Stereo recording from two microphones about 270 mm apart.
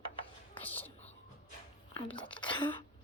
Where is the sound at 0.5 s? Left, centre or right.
Centre.